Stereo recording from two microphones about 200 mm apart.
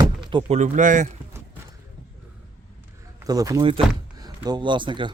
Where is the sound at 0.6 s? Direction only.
40° right (ahead or behind).